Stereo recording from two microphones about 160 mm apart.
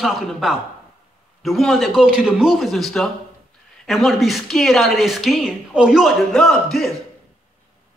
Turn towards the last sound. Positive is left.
turn(degrees=0)  # may be behind; listen again after turning